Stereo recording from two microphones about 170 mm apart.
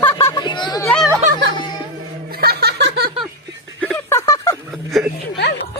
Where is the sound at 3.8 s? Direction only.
5° left (ahead or behind).